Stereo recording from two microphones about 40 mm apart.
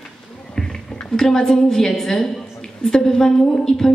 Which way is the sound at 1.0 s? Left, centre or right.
Centre.